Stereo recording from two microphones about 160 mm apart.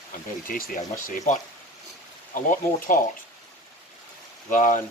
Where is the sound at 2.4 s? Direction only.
55° left (ahead or behind).